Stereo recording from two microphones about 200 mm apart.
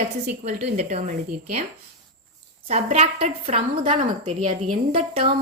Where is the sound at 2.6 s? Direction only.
35° right (ahead or behind).